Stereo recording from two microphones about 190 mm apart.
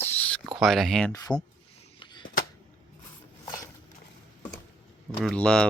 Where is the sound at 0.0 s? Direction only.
10° left (ahead or behind).